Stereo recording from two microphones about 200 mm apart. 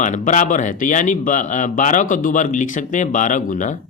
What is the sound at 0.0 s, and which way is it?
Speech, 40° left (ahead or behind).